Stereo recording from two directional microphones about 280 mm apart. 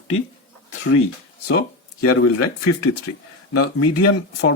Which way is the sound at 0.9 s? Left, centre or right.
Left.